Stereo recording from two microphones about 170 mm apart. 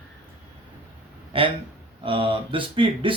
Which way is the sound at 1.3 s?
30° right (ahead or behind).